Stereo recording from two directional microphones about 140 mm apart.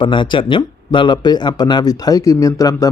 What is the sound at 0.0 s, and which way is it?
Speech, 35° left (ahead or behind).